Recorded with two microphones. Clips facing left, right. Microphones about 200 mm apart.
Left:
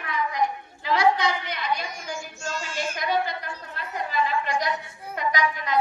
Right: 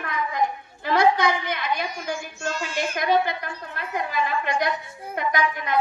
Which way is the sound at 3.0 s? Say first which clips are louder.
Right 5 dB; 55° right (ahead or behind).